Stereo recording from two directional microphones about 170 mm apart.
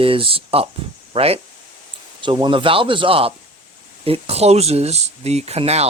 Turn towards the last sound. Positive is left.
turn(degrees=-40)  # may be behind; listen again after turning